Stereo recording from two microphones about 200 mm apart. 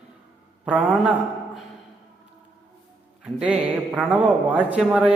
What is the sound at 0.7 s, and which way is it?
Speech, 5° right (ahead or behind).